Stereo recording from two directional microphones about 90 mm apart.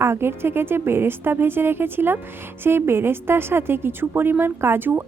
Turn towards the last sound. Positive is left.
turn(degrees=-25)  # may be behind; listen again after turning